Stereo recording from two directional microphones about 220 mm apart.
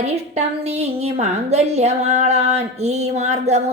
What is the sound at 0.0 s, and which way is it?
A woman's voice, 30° right (ahead or behind).